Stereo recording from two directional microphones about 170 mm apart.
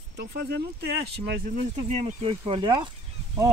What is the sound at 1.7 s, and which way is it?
Speech, 35° right (ahead or behind).